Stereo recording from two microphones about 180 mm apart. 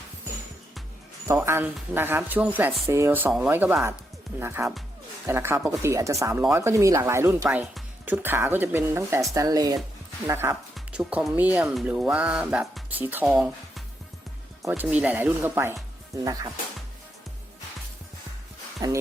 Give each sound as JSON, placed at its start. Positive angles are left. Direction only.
{"t": 1.3, "sound": "speech", "side_deg": -15}
{"t": 10.8, "sound": "speech", "side_deg": -5}
{"t": 18.8, "sound": "speech", "side_deg": -20}